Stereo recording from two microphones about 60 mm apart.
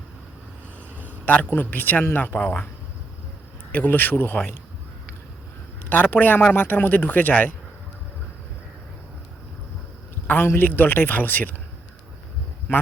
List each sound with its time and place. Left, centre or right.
1.2 s speech: left
3.7 s speech: left
5.9 s speech: left
10.2 s speech: left